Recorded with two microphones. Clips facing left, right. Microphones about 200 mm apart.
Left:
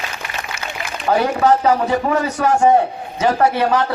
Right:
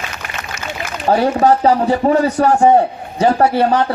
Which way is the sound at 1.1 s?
35° right (ahead or behind).